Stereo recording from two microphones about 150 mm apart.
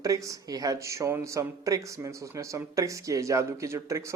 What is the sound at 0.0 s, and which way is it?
Speech, 20° right (ahead or behind).